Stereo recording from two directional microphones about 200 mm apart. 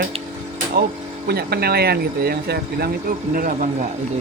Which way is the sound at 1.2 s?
50° right (ahead or behind).